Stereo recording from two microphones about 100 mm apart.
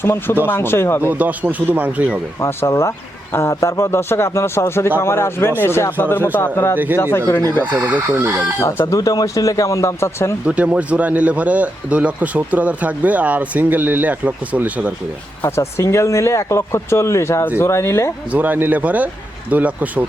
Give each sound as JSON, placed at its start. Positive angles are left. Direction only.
{"t": 0.0, "sound": "speech", "side_deg": 25}
{"t": 1.0, "sound": "a man's voice", "side_deg": -15}
{"t": 2.4, "sound": "speech", "side_deg": 25}
{"t": 7.6, "sound": "speech", "side_deg": -15}
{"t": 8.9, "sound": "speech", "side_deg": 40}
{"t": 10.4, "sound": "a man's voice", "side_deg": -15}
{"t": 15.4, "sound": "speech", "side_deg": 25}
{"t": 18.3, "sound": "a man's voice", "side_deg": -15}